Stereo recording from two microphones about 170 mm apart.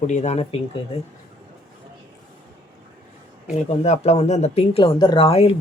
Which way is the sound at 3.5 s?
40° left (ahead or behind).